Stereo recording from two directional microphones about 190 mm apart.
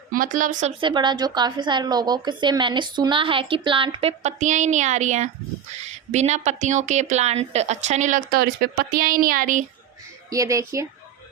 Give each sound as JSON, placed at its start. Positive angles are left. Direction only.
{"t": 0.1, "sound": "speech", "side_deg": -45}
{"t": 0.8, "sound": "a woman's voice", "side_deg": -25}
{"t": 4.2, "sound": "a woman's voice", "side_deg": -40}
{"t": 10.2, "sound": "speech", "side_deg": -15}